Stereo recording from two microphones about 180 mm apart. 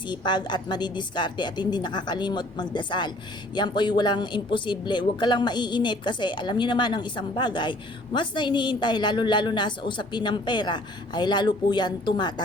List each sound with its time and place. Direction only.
0.1 s speech: 25° left (ahead or behind)